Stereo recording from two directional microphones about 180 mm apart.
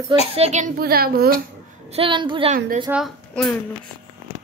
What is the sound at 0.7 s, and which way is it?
Speech, 55° right (ahead or behind).